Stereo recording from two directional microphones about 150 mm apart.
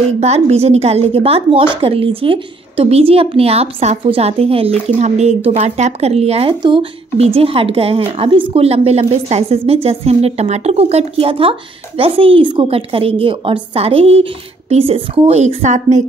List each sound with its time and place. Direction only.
0.2 s a woman's voice: 45° right (ahead or behind)